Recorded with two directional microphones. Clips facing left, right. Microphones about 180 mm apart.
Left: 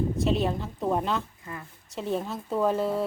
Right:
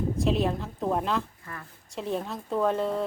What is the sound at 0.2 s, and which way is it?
Speech, centre (ahead or behind).